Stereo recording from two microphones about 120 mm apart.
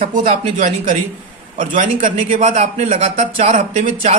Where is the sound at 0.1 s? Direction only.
90° right.